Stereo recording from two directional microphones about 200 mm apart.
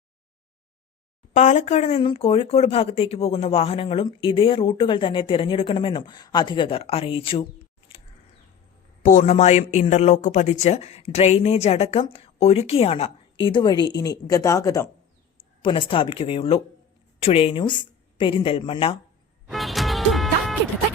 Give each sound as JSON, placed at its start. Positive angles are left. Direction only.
{"t": 1.3, "sound": "speech", "side_deg": 35}
{"t": 9.0, "sound": "speech", "side_deg": 35}
{"t": 15.6, "sound": "speech", "side_deg": 25}
{"t": 19.5, "sound": "music", "side_deg": 0}